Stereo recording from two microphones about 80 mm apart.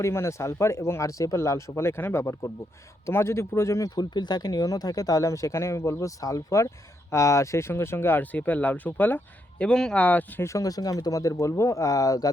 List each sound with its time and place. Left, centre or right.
0.0 s speech: left
4.1 s speech: left
9.6 s speech: centre
10.4 s speech: left